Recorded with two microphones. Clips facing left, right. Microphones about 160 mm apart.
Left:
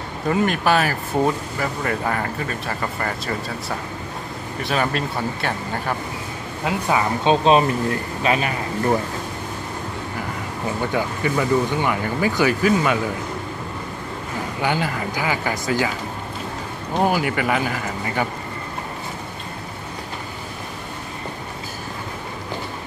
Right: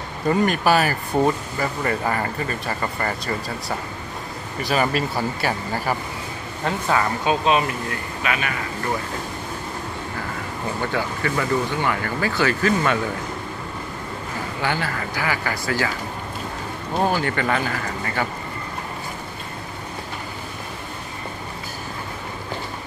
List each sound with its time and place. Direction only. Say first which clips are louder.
0.3 s speech: right 1 dB; centre (ahead or behind)
6.6 s speech: left 1 dB; 15° left (ahead or behind)
7.2 s speech: left 6 dB; 35° left (ahead or behind)
10.9 s speech: left 3 dB; 15° left (ahead or behind)
14.6 s speech: left 3 dB; 15° left (ahead or behind)
17.0 s speech: left 2 dB; 10° left (ahead or behind)